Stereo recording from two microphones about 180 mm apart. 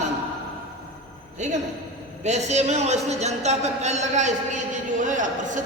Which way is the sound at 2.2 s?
40° right (ahead or behind).